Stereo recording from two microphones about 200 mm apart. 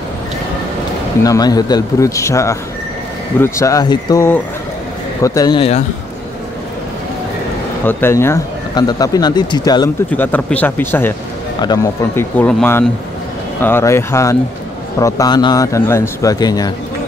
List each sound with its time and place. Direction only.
1.2 s speech: 20° left (ahead or behind)
7.8 s speech: 10° left (ahead or behind)
10.1 s speech: 10° left (ahead or behind)